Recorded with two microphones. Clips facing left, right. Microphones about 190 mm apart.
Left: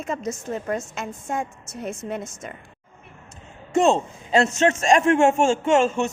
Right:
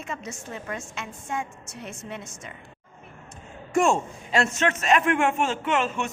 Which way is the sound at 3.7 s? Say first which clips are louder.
Left 3 dB; 20° left (ahead or behind).